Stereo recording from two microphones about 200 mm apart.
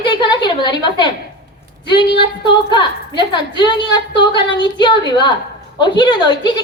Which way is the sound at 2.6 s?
20° left (ahead or behind).